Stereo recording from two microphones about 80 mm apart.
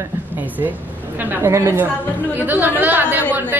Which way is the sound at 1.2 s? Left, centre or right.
Right.